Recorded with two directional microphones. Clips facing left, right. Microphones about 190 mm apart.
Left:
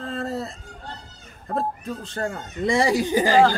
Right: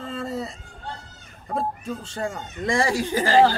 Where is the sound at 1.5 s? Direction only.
Centre (ahead or behind).